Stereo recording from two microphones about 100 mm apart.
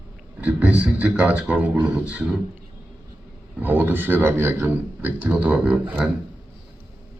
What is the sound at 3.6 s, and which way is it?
Speech, 15° right (ahead or behind).